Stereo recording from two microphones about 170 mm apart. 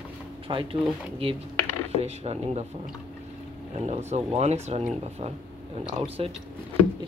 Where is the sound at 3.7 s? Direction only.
40° right (ahead or behind).